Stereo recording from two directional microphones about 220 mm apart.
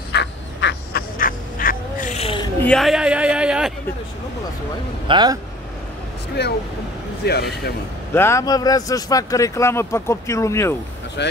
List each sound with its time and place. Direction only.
0.1 s duck: 50° left (ahead or behind); by 2.5 s 25° left (ahead or behind)
2.6 s a sound: centre (ahead or behind)
5.0 s speech: 20° right (ahead or behind)
6.4 s speech: 45° left (ahead or behind)
8.1 s speech: 10° left (ahead or behind)
11.2 s speech: 50° left (ahead or behind)